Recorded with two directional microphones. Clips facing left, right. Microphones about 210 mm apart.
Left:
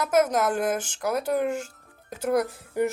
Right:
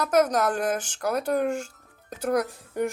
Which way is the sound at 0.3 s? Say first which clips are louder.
Even; 5° left (ahead or behind).